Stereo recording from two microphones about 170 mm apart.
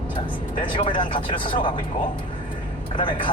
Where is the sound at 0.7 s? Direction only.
30° left (ahead or behind).